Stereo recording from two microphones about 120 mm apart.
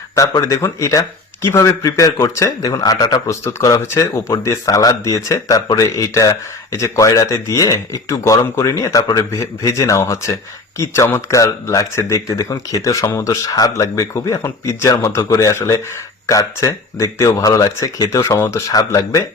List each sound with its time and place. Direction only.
0.2 s speech: 25° left (ahead or behind)